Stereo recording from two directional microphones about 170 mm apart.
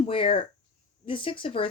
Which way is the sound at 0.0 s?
30° left (ahead or behind).